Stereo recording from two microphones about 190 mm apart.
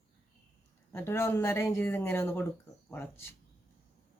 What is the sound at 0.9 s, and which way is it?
Speech, 10° left (ahead or behind).